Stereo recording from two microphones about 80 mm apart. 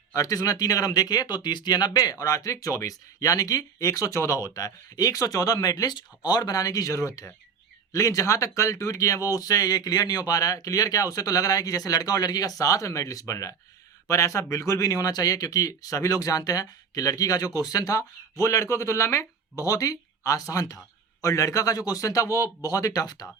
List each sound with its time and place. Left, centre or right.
0.1 s speech: left